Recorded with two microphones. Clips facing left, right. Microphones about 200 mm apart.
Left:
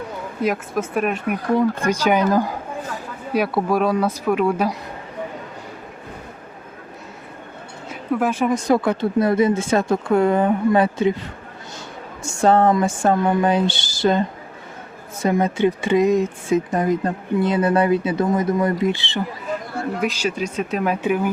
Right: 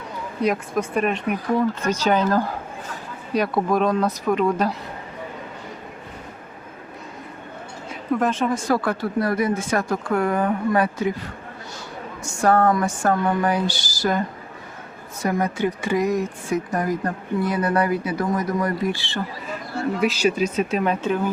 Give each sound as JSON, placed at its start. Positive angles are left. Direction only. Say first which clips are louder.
{"t": 0.4, "sound": "speech", "louder": "even", "side_deg": 5}
{"t": 7.9, "sound": "a sound", "louder": "left 1 dB", "side_deg": 5}
{"t": 8.6, "sound": "speech", "louder": "left 4 dB", "side_deg": 20}
{"t": 12.2, "sound": "speech", "louder": "left 2 dB", "side_deg": 25}
{"t": 20.1, "sound": "speech", "louder": "right 3 dB", "side_deg": -10}